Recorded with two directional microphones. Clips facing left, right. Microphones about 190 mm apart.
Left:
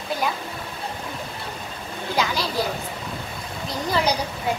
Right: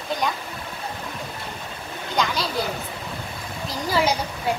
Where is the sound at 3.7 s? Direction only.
Centre (ahead or behind).